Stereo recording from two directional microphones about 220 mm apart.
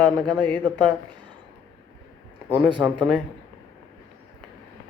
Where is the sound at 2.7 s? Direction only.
20° right (ahead or behind).